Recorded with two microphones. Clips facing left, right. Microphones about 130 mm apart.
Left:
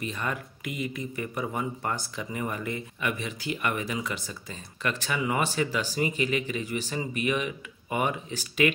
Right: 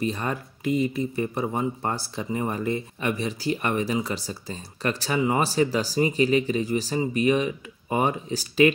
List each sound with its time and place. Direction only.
0.0 s speech: 35° right (ahead or behind)